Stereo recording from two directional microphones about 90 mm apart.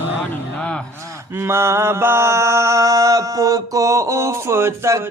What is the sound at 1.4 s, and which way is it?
Mantra, 30° right (ahead or behind).